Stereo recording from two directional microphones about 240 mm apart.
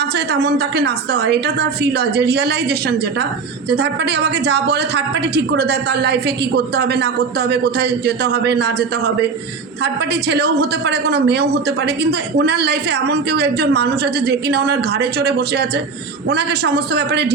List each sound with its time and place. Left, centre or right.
0.0 s a woman's voice: right